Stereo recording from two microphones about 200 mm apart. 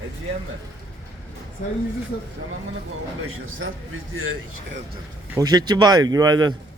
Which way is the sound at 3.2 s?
90° right.